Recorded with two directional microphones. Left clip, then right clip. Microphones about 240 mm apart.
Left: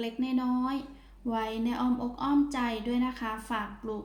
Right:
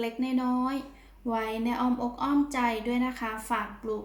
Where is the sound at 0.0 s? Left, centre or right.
Centre.